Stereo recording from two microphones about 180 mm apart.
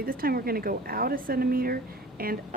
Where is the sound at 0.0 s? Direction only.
55° right (ahead or behind).